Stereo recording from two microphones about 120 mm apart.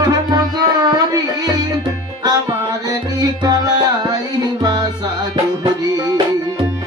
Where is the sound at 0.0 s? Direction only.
35° right (ahead or behind).